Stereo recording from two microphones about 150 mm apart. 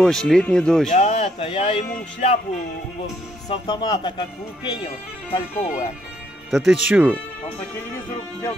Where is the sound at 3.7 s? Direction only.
30° left (ahead or behind).